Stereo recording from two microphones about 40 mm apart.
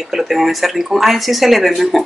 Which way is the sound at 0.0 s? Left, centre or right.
Centre.